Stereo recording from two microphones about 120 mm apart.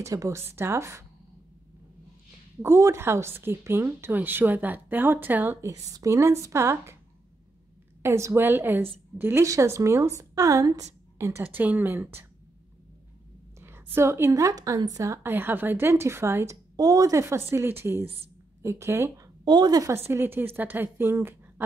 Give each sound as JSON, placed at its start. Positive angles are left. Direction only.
{"t": 0.0, "sound": "a woman's voice", "side_deg": -25}
{"t": 2.6, "sound": "a woman's voice", "side_deg": -25}
{"t": 5.7, "sound": "a woman's voice", "side_deg": -30}
{"t": 8.0, "sound": "a woman's voice", "side_deg": -25}
{"t": 13.6, "sound": "a woman's voice", "side_deg": -20}
{"t": 16.7, "sound": "a woman's voice", "side_deg": -30}
{"t": 18.0, "sound": "a woman's voice", "side_deg": -55}
{"t": 18.6, "sound": "a woman's voice", "side_deg": -25}
{"t": 20.1, "sound": "a woman's voice", "side_deg": -20}